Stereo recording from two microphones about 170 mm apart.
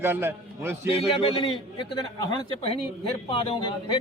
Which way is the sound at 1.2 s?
35° left (ahead or behind).